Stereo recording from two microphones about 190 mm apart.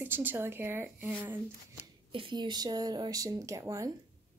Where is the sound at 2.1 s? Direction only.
25° right (ahead or behind).